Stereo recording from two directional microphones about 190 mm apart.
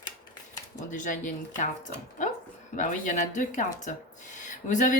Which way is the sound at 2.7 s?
40° left (ahead or behind).